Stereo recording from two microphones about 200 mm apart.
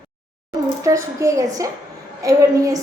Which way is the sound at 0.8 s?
15° right (ahead or behind).